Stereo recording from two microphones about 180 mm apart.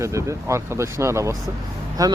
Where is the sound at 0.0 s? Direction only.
15° right (ahead or behind).